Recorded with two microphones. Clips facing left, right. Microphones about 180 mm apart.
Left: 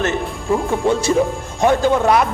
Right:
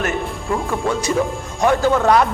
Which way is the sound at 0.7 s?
25° left (ahead or behind).